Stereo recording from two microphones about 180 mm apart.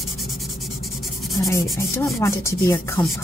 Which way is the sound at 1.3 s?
15° left (ahead or behind).